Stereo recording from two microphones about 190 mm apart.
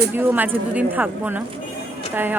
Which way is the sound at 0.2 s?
10° right (ahead or behind).